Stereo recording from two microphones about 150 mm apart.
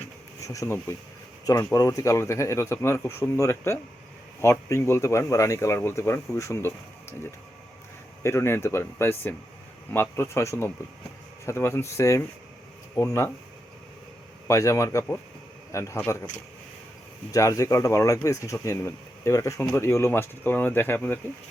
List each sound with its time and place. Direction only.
0.4 s speech: 20° left (ahead or behind)
8.2 s speech: 20° left (ahead or behind)
14.4 s speech: 20° left (ahead or behind)
17.3 s speech: 20° left (ahead or behind)